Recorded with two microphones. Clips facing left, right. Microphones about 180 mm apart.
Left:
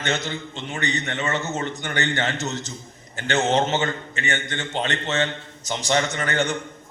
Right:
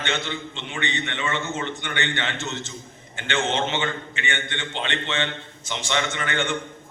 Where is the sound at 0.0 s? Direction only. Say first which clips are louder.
Left 2 dB; 40° left (ahead or behind).